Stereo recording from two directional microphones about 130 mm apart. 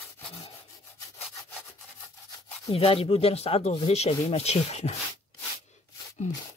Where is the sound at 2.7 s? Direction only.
45° left (ahead or behind).